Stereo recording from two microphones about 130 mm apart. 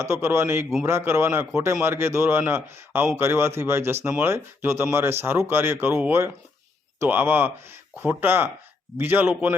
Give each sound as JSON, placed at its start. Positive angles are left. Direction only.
{"t": 0.0, "sound": "a man's voice", "side_deg": -20}